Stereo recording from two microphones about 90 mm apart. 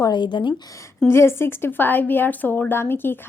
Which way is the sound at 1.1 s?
30° left (ahead or behind).